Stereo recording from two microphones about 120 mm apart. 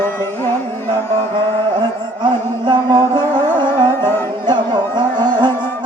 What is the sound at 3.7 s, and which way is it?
Music, 20° left (ahead or behind).